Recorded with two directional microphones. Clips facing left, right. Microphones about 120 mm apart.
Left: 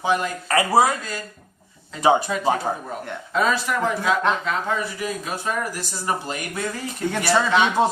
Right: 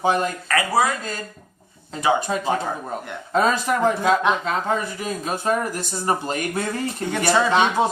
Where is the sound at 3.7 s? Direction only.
35° right (ahead or behind).